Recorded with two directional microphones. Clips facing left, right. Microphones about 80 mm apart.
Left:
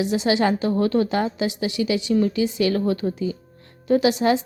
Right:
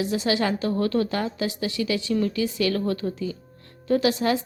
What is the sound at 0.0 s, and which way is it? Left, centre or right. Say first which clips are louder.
A woman's voice: left 4 dB; centre.